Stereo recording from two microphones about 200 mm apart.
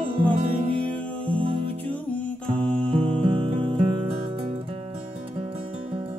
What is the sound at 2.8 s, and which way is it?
Music, 25° right (ahead or behind).